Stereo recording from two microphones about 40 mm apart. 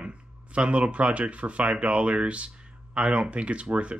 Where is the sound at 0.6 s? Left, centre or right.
Right.